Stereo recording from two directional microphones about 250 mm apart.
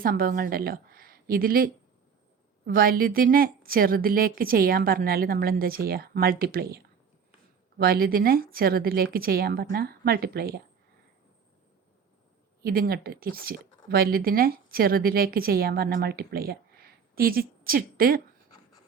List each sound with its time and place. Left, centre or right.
0.0 s speech: right
12.6 s speech: right